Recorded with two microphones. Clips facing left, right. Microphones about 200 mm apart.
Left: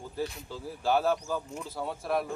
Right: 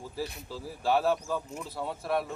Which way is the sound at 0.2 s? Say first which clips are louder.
Left 2 dB; centre (ahead or behind).